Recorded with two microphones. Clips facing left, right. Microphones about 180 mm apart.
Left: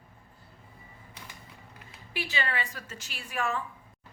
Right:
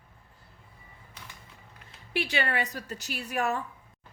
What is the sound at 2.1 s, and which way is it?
A woman's voice, 60° right (ahead or behind).